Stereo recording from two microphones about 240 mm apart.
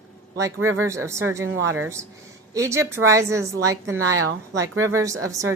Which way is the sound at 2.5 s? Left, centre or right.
Centre.